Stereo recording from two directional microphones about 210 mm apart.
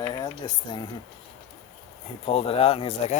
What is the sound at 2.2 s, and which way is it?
Speech, 25° left (ahead or behind).